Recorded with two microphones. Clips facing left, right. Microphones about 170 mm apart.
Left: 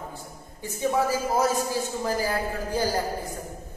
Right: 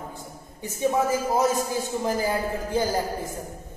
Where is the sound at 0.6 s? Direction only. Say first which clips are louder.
Right 1 dB; 20° right (ahead or behind).